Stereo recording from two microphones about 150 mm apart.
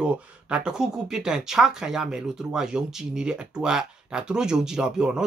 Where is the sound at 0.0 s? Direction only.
5° right (ahead or behind).